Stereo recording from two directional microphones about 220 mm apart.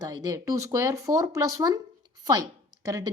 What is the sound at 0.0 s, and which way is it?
A woman's voice, 15° right (ahead or behind).